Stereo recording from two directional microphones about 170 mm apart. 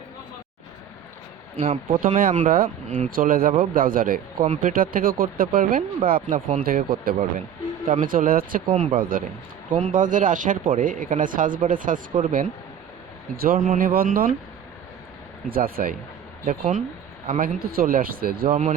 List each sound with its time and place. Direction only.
1.6 s speech: 40° right (ahead or behind)
2.0 s speech: 55° right (ahead or behind)
8.7 s speech: 35° right (ahead or behind)
9.0 s speech: 55° right (ahead or behind)
15.4 s speech: 60° right (ahead or behind)